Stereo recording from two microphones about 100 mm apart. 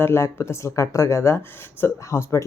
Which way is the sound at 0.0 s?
25° left (ahead or behind).